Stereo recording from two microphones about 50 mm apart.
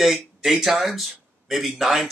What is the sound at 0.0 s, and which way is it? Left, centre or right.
Speech, centre.